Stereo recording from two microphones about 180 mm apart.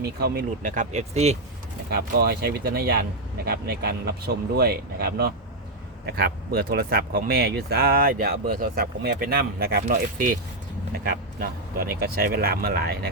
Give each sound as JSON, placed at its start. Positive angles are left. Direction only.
{"t": 0.0, "sound": "speech", "side_deg": -60}
{"t": 1.9, "sound": "speech", "side_deg": -60}
{"t": 9.8, "sound": "speech", "side_deg": -50}